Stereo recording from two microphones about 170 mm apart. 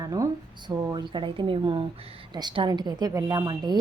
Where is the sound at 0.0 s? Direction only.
20° right (ahead or behind).